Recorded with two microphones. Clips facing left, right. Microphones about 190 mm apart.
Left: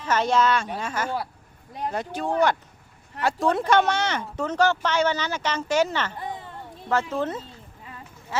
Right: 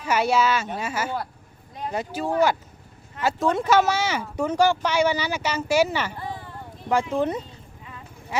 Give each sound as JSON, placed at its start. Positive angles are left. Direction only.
{"t": 0.0, "sound": "speech", "side_deg": -10}
{"t": 6.1, "sound": "a sound", "side_deg": 20}
{"t": 6.9, "sound": "speech", "side_deg": -15}